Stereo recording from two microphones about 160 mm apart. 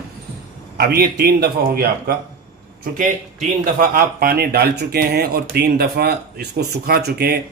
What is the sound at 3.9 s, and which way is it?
Speech, 70° right (ahead or behind).